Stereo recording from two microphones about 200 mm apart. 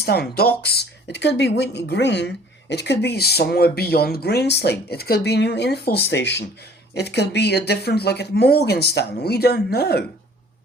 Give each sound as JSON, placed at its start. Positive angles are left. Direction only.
{"t": 0.0, "sound": "speech", "side_deg": 55}